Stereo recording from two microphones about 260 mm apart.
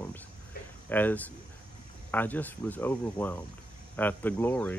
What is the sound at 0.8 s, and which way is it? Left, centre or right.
Speech, centre.